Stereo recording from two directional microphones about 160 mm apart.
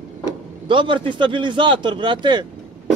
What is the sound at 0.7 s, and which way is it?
A man's voice, 30° right (ahead or behind).